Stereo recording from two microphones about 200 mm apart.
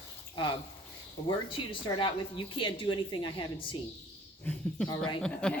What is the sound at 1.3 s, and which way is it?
Speech, 25° left (ahead or behind).